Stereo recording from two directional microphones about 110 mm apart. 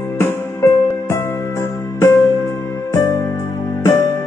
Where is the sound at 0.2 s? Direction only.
20° left (ahead or behind).